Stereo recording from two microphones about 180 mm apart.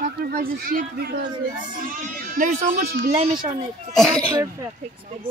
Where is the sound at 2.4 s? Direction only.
45° right (ahead or behind).